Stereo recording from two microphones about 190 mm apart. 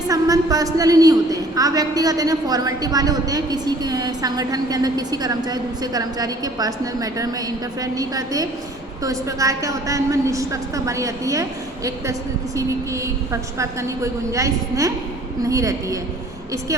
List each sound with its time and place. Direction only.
0.1 s a woman's voice: 20° right (ahead or behind)